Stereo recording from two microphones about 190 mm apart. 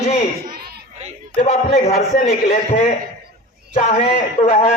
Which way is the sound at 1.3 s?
35° left (ahead or behind).